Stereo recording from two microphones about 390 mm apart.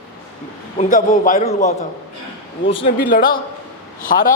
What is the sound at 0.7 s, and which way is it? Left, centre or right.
A man's voice, centre.